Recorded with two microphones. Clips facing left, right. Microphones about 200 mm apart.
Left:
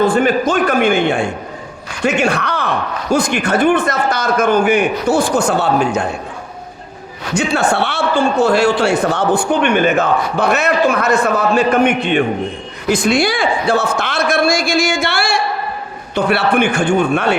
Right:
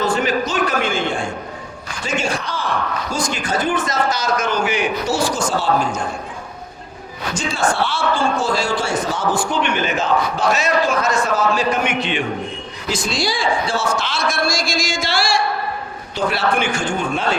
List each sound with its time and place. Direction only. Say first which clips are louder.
0.0 s a sound: left 6 dB; 55° left (ahead or behind)
2.0 s a man's voice: left 7 dB; 65° left (ahead or behind)
7.3 s a man's voice: left 5 dB; 65° left (ahead or behind)